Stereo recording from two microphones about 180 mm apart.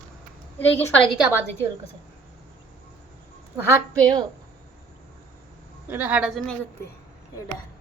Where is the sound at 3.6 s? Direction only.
20° right (ahead or behind).